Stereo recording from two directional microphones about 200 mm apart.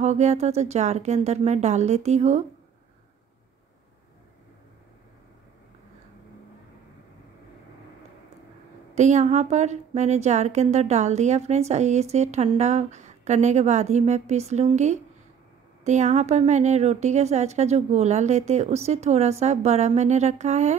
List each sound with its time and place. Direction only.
0.0 s a woman's voice: 35° right (ahead or behind)
8.9 s a woman's voice: 35° right (ahead or behind)